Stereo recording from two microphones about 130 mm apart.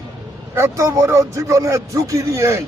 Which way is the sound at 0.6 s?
25° right (ahead or behind).